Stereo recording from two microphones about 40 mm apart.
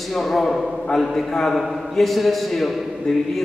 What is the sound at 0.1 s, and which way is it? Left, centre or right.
A man's voice, centre.